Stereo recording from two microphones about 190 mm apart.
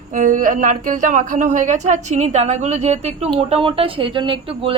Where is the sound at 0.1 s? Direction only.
45° right (ahead or behind).